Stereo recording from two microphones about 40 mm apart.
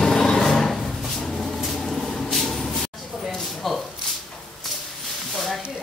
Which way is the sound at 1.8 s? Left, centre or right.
Centre.